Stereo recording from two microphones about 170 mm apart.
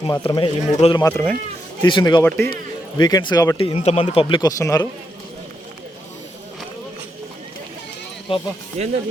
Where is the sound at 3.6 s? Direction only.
35° left (ahead or behind).